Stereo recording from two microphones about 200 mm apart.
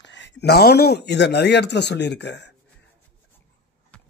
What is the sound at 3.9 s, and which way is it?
Clip-clop, 5° left (ahead or behind).